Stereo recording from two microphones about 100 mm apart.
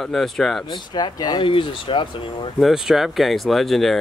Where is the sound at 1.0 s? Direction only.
45° left (ahead or behind).